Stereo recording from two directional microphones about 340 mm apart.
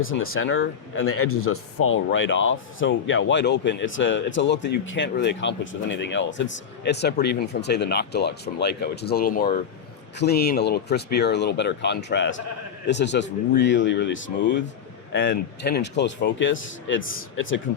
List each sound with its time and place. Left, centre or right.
0.0 s speech: left